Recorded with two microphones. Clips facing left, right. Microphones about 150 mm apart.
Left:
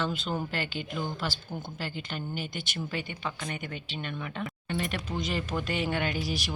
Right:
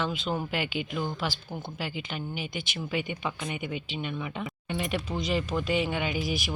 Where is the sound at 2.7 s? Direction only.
10° right (ahead or behind).